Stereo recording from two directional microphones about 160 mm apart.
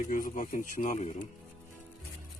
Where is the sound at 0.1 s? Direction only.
60° left (ahead or behind).